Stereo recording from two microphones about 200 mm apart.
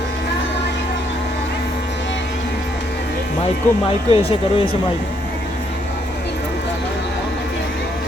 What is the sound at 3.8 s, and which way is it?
Speech, 30° left (ahead or behind).